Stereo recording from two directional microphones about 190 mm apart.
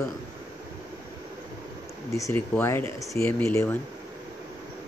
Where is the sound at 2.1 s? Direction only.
15° left (ahead or behind).